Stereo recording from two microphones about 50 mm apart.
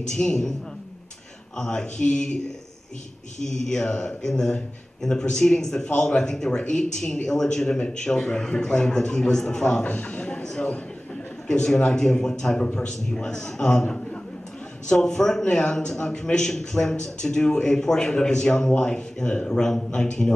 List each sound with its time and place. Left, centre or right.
0.1 s a man's voice: centre
1.6 s a man's voice: centre
3.6 s a man's voice: centre
9.8 s a man's voice: left
11.4 s a man's voice: centre
14.9 s a man's voice: centre